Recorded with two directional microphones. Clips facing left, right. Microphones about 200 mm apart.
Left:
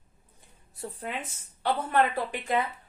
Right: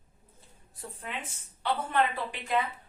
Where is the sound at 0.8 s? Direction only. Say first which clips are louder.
Left 4 dB; 40° left (ahead or behind).